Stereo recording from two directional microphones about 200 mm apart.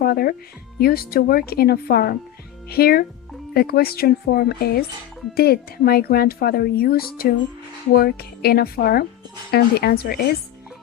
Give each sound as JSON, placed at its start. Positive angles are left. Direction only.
{"t": 0.0, "sound": "speech", "side_deg": 50}